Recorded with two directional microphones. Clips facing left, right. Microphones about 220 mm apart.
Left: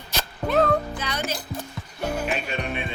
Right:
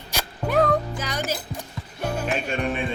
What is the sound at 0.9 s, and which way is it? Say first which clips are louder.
Music: right 1 dB; 45° right (ahead or behind).